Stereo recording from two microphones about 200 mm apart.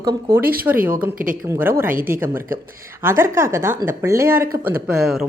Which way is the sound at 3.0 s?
10° right (ahead or behind).